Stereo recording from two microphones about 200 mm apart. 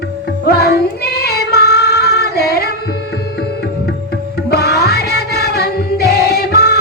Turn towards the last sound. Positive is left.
turn(degrees=55)  # may be behind; listen again after turning